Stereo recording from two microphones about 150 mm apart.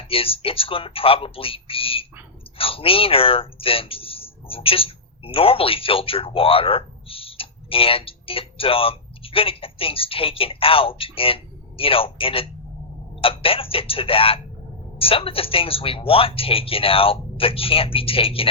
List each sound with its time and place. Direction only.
0.1 s speech: 40° left (ahead or behind)